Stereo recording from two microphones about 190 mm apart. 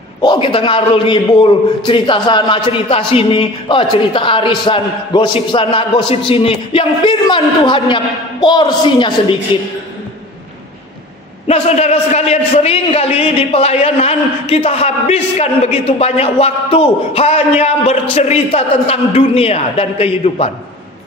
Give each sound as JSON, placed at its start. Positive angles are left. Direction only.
{"t": 0.2, "sound": "a man's voice", "side_deg": 25}
{"t": 11.4, "sound": "a man's voice", "side_deg": 35}